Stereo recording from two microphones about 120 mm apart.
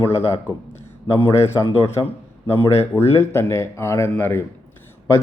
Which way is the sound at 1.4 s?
25° left (ahead or behind).